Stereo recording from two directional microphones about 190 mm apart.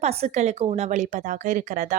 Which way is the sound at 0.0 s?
35° right (ahead or behind).